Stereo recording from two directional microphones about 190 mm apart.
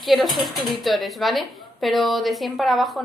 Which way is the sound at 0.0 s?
Centre (ahead or behind).